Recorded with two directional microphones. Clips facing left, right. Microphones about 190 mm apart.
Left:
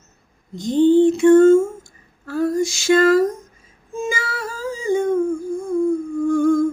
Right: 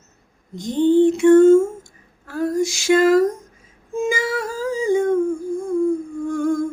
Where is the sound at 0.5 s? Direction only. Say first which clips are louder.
Left 2 dB; 15° right (ahead or behind).